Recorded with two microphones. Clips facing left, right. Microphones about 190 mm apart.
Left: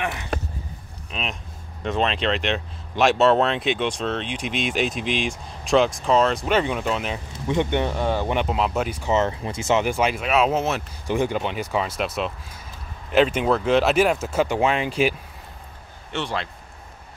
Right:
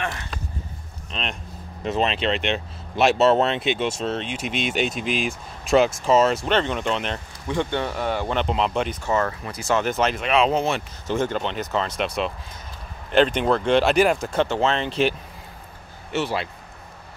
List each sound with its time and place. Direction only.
0.0 s a sound: 15° left (ahead or behind)
1.1 s speech: 5° left (ahead or behind)
7.4 s speech: 20° left (ahead or behind)
8.5 s speech: 5° left (ahead or behind)
9.1 s speech: 25° left (ahead or behind)
9.8 s speech: 10° left (ahead or behind)
16.1 s speech: 5° right (ahead or behind)